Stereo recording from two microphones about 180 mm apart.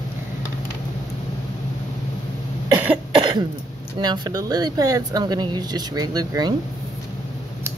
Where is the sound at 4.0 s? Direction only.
20° right (ahead or behind).